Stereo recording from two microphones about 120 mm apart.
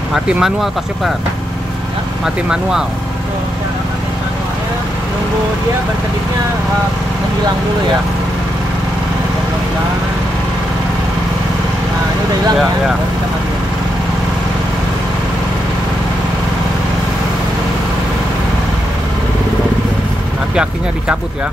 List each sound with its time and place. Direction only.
0.1 s speech: 5° right (ahead or behind)
2.2 s speech: 5° right (ahead or behind)